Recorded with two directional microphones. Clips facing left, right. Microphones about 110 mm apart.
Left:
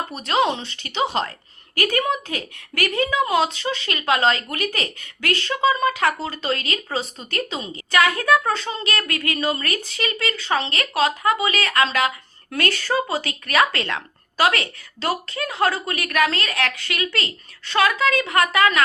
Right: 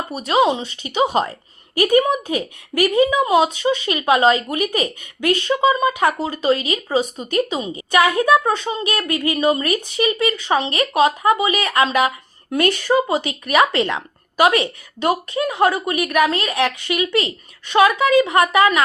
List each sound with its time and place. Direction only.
0.1 s speech: 5° right (ahead or behind)
1.7 s a woman's voice: 20° right (ahead or behind)